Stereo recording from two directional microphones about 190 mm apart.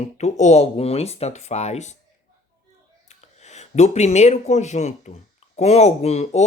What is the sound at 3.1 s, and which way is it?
Speech, 35° left (ahead or behind).